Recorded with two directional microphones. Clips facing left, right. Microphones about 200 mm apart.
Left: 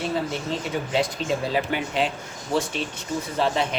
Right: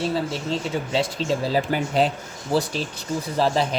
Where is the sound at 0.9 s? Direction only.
30° right (ahead or behind).